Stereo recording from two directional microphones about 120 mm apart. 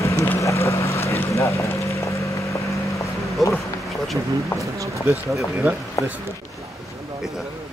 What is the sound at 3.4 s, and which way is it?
Speech, centre (ahead or behind).